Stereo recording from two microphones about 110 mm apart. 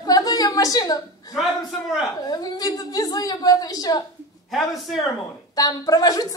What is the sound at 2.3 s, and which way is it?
Speech, 35° left (ahead or behind).